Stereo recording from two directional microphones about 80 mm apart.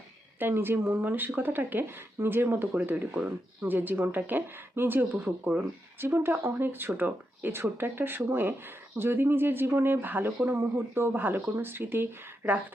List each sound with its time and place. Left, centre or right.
0.3 s speech: right
5.2 s speech: centre
6.0 s speech: right